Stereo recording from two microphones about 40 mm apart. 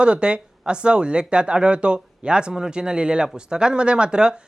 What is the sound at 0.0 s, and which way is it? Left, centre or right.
Speech, right.